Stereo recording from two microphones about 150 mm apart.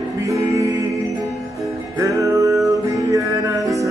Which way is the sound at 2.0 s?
20° right (ahead or behind).